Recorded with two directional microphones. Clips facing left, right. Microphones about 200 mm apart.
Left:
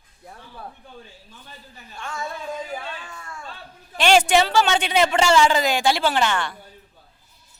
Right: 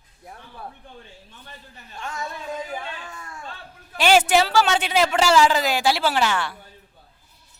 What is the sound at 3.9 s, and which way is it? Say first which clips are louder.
A man's voice: even; 5° right (ahead or behind).